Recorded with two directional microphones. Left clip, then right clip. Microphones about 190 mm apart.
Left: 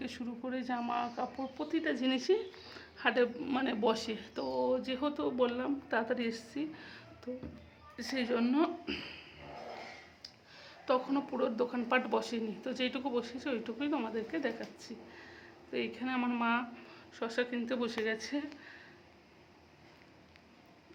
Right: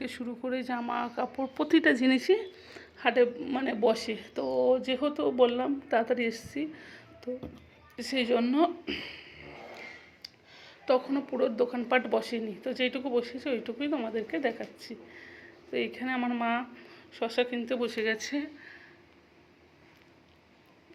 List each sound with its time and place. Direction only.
0.0 s speech: 20° right (ahead or behind)
1.5 s speech: 45° right (ahead or behind); by 2.5 s 20° right (ahead or behind)
3.0 s a woman's voice: 10° right (ahead or behind)
7.9 s a woman's voice: 25° left (ahead or behind)
8.3 s a woman's voice: 5° right (ahead or behind)
10.8 s a woman's voice: 5° right (ahead or behind)